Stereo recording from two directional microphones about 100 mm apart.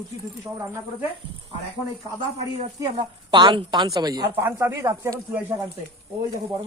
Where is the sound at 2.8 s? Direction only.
50° right (ahead or behind).